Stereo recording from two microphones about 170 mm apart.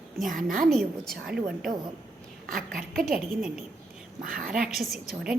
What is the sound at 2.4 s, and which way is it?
Speech, 55° right (ahead or behind).